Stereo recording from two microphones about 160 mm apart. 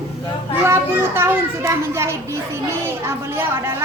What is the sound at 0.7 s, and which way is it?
A child's voice, 15° right (ahead or behind).